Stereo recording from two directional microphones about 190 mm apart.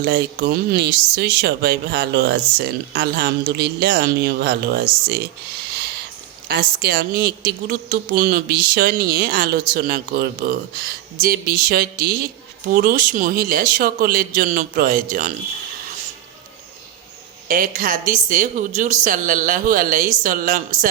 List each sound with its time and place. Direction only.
0.0 s speech: 60° right (ahead or behind)
6.5 s a woman's voice: 55° right (ahead or behind)
17.5 s a woman's voice: 45° right (ahead or behind)